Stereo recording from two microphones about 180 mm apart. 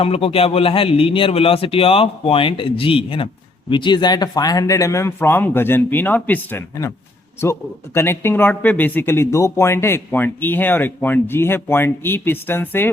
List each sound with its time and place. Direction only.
0.0 s a man's voice: 30° left (ahead or behind); by 6.9 s 15° left (ahead or behind)
7.9 s speech: 15° left (ahead or behind)